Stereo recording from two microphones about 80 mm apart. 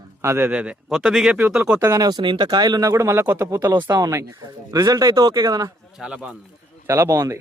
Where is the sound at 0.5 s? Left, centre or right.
Centre.